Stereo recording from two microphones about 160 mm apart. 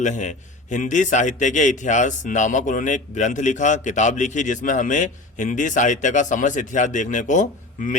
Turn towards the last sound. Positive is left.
turn(degrees=55)  # may be behind; listen again after turning